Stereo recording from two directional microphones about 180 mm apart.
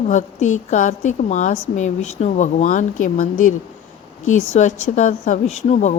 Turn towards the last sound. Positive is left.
turn(degrees=40)  # may be behind; listen again after turning